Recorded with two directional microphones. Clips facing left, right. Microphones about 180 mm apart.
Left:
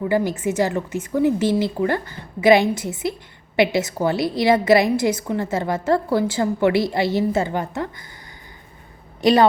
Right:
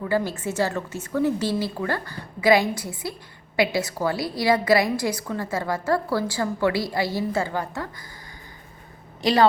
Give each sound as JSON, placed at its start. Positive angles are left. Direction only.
{"t": 0.0, "sound": "a woman's voice", "side_deg": 15}
{"t": 9.2, "sound": "a woman's voice", "side_deg": 20}